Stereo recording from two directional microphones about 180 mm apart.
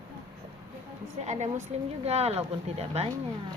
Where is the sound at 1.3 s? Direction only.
40° right (ahead or behind).